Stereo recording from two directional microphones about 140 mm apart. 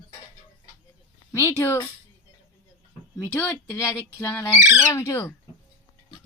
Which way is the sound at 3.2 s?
20° left (ahead or behind).